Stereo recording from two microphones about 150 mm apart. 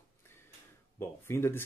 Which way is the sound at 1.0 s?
15° left (ahead or behind).